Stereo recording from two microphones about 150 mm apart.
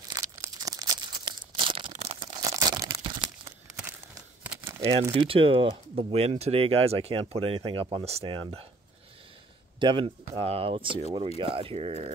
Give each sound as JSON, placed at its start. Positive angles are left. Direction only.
{"t": 0.1, "sound": "crumpling", "side_deg": -25}
{"t": 1.9, "sound": "a sound", "side_deg": -45}
{"t": 2.4, "sound": "crumpling", "side_deg": -20}
{"t": 4.4, "sound": "crumpling", "side_deg": -10}
{"t": 5.1, "sound": "speech", "side_deg": -35}
{"t": 9.8, "sound": "speech", "side_deg": -35}